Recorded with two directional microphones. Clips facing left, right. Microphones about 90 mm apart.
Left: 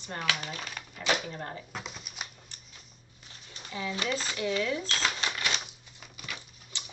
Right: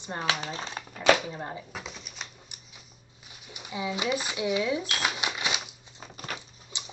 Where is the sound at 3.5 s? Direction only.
15° right (ahead or behind).